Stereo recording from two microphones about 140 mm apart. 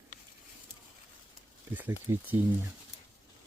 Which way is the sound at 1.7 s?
15° right (ahead or behind).